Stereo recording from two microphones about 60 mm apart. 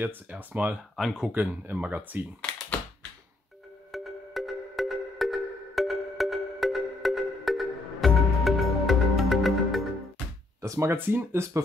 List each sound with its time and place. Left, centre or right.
0.4 s speech: right
0.9 s speech: centre
1.3 s speech: right
3.9 s music: centre
10.6 s speech: right
11.1 s speech: right